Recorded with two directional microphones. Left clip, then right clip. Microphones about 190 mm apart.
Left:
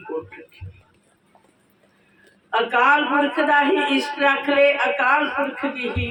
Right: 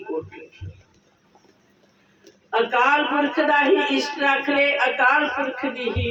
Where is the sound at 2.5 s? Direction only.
20° left (ahead or behind).